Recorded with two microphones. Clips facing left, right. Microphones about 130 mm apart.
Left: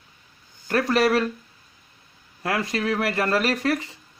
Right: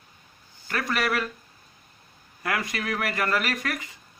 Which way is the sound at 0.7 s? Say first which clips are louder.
Left 7 dB; 35° left (ahead or behind).